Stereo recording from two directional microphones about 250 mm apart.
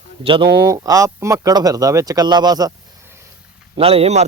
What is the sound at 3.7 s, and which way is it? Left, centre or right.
Speech, right.